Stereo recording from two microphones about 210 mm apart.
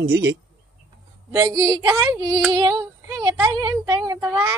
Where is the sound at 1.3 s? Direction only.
20° right (ahead or behind).